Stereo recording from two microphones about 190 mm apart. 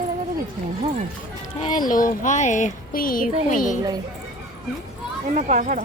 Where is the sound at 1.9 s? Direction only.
45° left (ahead or behind).